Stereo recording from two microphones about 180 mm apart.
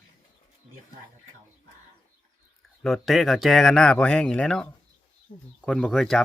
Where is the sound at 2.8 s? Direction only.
Centre (ahead or behind).